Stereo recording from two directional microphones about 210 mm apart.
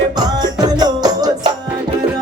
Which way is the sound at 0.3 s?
20° right (ahead or behind).